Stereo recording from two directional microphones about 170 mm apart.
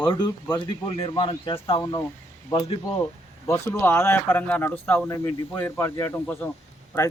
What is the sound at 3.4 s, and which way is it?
Speech, 15° left (ahead or behind).